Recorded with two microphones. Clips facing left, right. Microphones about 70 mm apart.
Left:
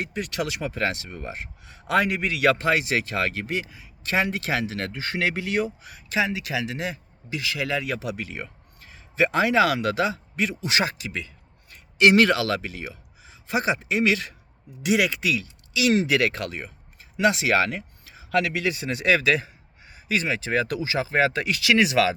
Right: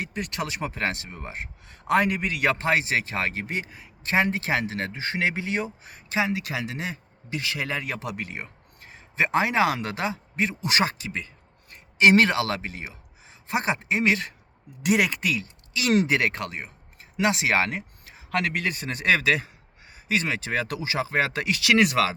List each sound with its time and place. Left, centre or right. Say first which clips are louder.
0.2 s speech: left 1 dB; right
4.0 s speech: right 1 dB; right
11.7 s speech: even; right
16.0 s speech: left 2 dB; right